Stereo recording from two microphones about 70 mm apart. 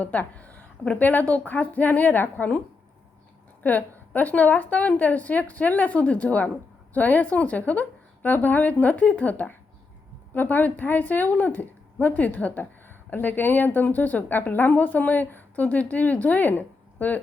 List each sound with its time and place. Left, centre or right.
0.0 s a woman's voice: left
3.6 s a woman's voice: left